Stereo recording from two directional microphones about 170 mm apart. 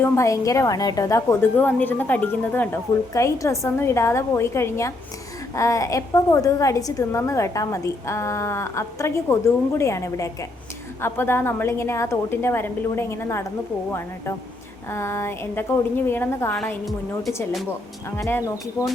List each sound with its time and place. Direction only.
0.0 s a woman's voice: 15° left (ahead or behind)
14.8 s a woman's voice: 15° left (ahead or behind)
18.2 s speech: 15° left (ahead or behind)